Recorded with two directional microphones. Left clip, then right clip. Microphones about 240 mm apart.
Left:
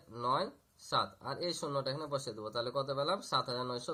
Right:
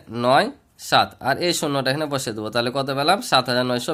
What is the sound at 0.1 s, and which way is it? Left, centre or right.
Speech, right.